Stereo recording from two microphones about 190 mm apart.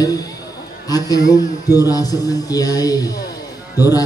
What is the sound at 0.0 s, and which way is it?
A man's voice, 20° left (ahead or behind).